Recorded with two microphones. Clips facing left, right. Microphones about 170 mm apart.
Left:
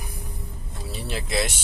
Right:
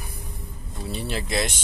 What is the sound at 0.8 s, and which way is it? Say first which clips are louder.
Vehicle: right 3 dB; centre (ahead or behind).